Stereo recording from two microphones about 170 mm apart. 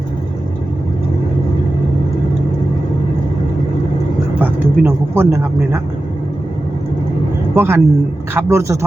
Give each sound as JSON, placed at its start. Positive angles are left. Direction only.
{"t": 4.4, "sound": "speech", "side_deg": -10}
{"t": 7.5, "sound": "a man's voice", "side_deg": -15}